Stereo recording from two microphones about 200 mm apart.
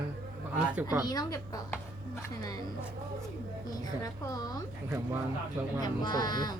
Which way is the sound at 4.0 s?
15° left (ahead or behind).